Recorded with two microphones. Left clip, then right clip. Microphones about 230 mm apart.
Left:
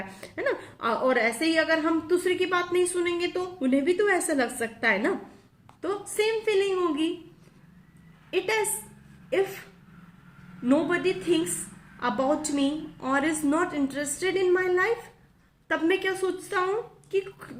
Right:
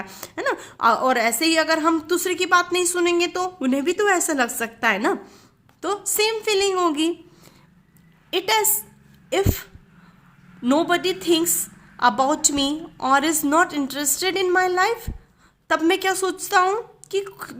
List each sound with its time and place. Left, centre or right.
0.2 s a woman's voice: right
8.3 s a woman's voice: right
10.7 s a woman's voice: right